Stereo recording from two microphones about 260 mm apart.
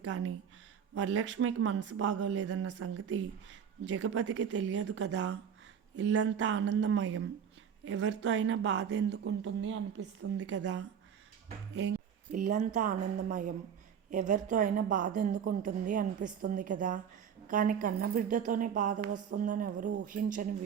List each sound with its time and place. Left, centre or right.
0.0 s speech: right
10.6 s speech: right
11.7 s a woman's voice: right